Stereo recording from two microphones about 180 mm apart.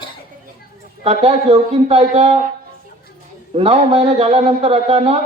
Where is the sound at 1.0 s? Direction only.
35° right (ahead or behind).